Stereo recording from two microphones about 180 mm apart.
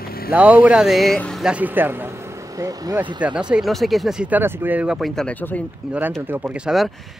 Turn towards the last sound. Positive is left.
turn(degrees=0)  # may be behind; listen again after turning